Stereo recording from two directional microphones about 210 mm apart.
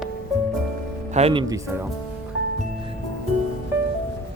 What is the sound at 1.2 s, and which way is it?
Speech, 30° right (ahead or behind).